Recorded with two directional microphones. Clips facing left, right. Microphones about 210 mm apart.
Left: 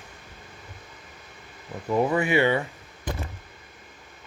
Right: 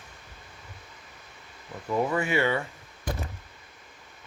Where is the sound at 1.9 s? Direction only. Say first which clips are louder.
Left 4 dB; 20° left (ahead or behind).